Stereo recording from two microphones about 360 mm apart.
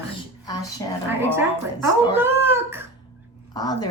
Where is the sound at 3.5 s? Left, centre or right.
Centre.